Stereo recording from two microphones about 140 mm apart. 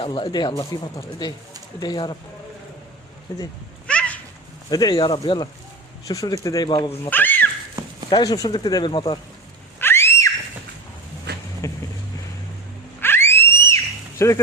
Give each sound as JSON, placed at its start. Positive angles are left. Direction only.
{"t": 0.0, "sound": "speech", "side_deg": 35}
{"t": 3.3, "sound": "speech", "side_deg": 25}
{"t": 3.8, "sound": "a sound", "side_deg": 10}
{"t": 4.7, "sound": "speech", "side_deg": 30}
{"t": 7.1, "sound": "speech", "side_deg": 15}
{"t": 8.1, "sound": "speech", "side_deg": 25}
{"t": 9.7, "sound": "a sound", "side_deg": 15}
{"t": 11.6, "sound": "boat", "side_deg": 20}
{"t": 13.0, "sound": "a sound", "side_deg": 15}
{"t": 14.2, "sound": "speech", "side_deg": 20}